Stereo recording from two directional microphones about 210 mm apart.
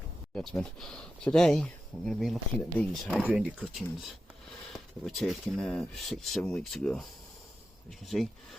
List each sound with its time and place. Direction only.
0.3 s speech: centre (ahead or behind)